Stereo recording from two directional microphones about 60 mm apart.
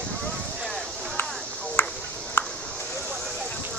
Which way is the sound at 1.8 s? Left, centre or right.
Left.